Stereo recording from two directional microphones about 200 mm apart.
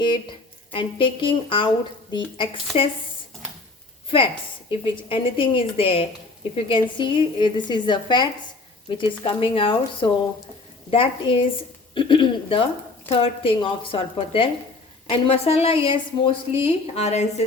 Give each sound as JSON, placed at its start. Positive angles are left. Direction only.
{"t": 0.0, "sound": "speech", "side_deg": 25}
{"t": 4.7, "sound": "a woman's voice", "side_deg": 25}